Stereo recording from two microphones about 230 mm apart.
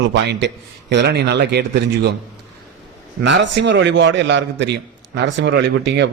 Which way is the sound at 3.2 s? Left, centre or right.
Right.